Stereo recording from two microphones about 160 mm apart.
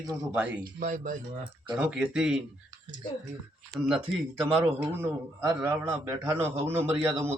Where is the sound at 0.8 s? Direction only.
55° right (ahead or behind).